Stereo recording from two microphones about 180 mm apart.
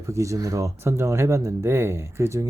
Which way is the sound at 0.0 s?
15° right (ahead or behind).